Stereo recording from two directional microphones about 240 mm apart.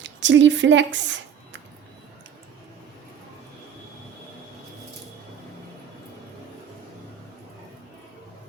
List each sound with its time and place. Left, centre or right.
0.0 s speech: right